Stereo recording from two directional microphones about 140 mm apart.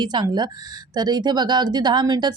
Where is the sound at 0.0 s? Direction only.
30° right (ahead or behind).